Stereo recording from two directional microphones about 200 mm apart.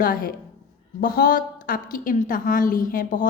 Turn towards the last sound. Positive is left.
turn(degrees=40)  # may be behind; listen again after turning